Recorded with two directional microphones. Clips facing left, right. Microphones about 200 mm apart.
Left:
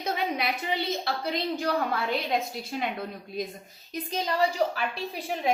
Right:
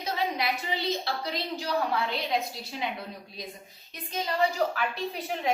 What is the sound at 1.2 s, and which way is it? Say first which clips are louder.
Speech: left 4 dB; 50° left (ahead or behind).